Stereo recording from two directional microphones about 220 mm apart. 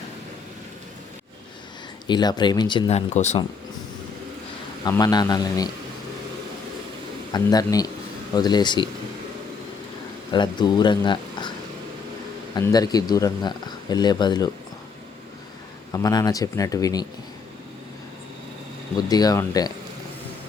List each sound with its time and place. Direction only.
2.0 s speech: 20° left (ahead or behind)
4.8 s speech: 15° left (ahead or behind)
7.3 s speech: 15° left (ahead or behind)
10.3 s speech: 20° left (ahead or behind)
12.5 s speech: 15° left (ahead or behind)
15.9 s speech: 15° left (ahead or behind)
18.9 s speech: 15° left (ahead or behind)